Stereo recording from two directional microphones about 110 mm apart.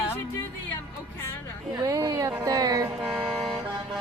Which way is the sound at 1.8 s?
30° right (ahead or behind).